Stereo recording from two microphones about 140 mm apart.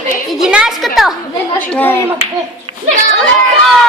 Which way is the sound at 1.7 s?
15° left (ahead or behind).